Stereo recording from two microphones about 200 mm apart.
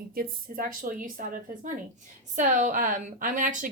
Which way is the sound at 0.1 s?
45° right (ahead or behind).